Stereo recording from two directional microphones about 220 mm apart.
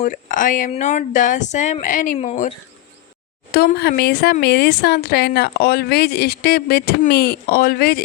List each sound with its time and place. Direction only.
0.0 s speech: 40° left (ahead or behind)
3.5 s speech: 45° left (ahead or behind)